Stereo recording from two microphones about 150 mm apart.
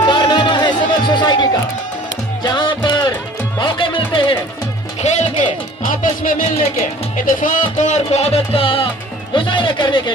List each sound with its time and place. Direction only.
0.0 s music: 30° left (ahead or behind)
5.0 s music: 55° left (ahead or behind); by 8.8 s 40° left (ahead or behind)
9.3 s a sound: 35° left (ahead or behind)